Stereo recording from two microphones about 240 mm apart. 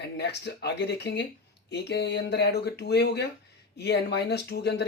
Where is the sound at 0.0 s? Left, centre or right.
Left.